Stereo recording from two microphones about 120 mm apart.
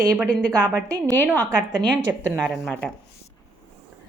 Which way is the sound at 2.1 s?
15° right (ahead or behind).